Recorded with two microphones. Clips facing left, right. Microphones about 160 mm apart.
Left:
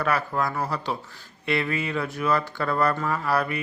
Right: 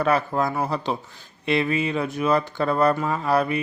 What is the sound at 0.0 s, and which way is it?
Speech, 25° right (ahead or behind).